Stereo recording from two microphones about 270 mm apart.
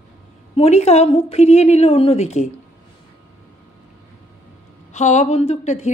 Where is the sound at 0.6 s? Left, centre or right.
Left.